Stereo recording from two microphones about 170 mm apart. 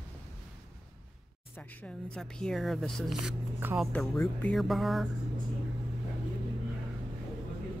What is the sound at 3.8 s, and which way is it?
Speech, 5° left (ahead or behind).